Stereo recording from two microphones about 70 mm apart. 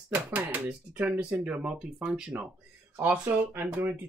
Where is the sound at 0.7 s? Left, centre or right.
Centre.